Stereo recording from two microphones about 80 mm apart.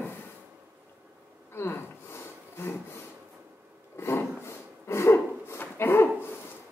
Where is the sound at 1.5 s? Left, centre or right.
Left.